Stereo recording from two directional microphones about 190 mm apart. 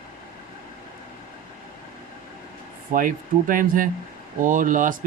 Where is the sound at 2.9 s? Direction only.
45° right (ahead or behind).